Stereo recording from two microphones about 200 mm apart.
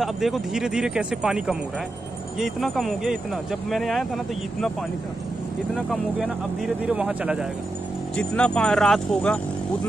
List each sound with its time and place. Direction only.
0.0 s speech: centre (ahead or behind)
5.8 s speech: centre (ahead or behind)